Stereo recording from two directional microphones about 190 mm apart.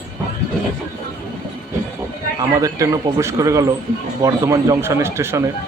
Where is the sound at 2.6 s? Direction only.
15° right (ahead or behind).